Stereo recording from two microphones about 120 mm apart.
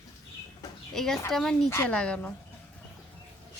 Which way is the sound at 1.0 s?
Centre (ahead or behind).